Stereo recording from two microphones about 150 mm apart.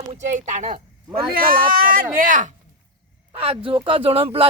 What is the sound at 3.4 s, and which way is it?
Speech, 40° right (ahead or behind).